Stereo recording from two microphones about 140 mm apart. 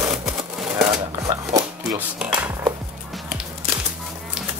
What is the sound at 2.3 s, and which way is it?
Dishes, 20° right (ahead or behind).